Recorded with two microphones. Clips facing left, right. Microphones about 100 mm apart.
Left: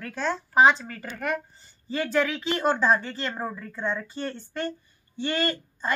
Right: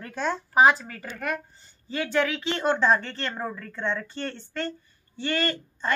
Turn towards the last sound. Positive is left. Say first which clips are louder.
# even
turn(degrees=15)  # may be behind; listen again after turning